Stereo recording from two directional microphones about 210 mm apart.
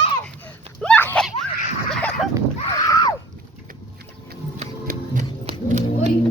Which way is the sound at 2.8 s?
15° left (ahead or behind).